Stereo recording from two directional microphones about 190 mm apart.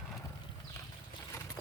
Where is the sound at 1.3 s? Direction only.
15° left (ahead or behind).